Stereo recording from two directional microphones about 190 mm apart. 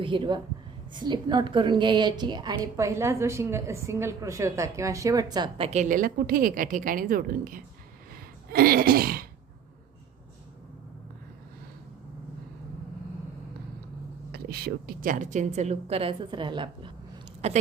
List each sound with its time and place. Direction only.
0.0 s a woman's voice: 25° right (ahead or behind); by 7.6 s 50° right (ahead or behind)
8.4 s throat clearing: 50° right (ahead or behind)
14.3 s a woman's voice: 55° right (ahead or behind); by 17.6 s 35° right (ahead or behind)